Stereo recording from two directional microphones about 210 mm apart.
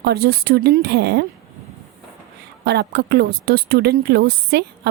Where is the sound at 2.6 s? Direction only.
50° right (ahead or behind).